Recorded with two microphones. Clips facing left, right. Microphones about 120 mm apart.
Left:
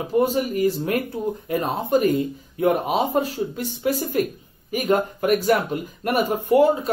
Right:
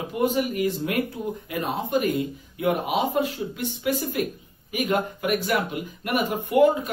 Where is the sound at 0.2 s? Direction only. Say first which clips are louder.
Left 2 dB; 35° left (ahead or behind).